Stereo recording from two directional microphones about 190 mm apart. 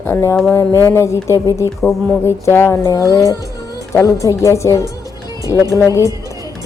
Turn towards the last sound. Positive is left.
turn(degrees=15)  # may be behind; listen again after turning